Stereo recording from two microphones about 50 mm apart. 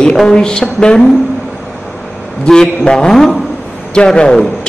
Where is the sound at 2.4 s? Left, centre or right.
Centre.